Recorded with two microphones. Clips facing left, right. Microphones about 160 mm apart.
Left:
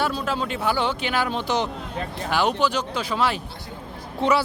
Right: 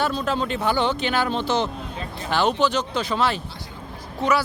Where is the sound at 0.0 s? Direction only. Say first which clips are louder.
Right 1 dB; 5° left (ahead or behind).